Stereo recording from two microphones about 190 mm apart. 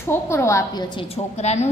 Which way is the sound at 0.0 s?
15° left (ahead or behind).